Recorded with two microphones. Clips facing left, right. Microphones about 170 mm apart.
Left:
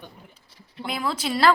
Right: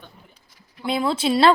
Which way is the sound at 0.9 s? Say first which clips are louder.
Right 6 dB; 25° right (ahead or behind).